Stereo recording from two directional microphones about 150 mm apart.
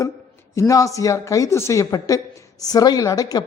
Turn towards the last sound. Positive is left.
turn(degrees=25)  # may be behind; listen again after turning